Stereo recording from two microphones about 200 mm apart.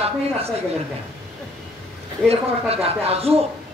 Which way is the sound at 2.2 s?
30° right (ahead or behind).